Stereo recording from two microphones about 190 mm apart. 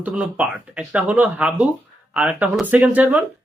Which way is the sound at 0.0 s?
5° right (ahead or behind).